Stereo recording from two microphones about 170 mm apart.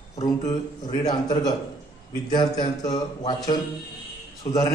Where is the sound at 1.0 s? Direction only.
25° left (ahead or behind).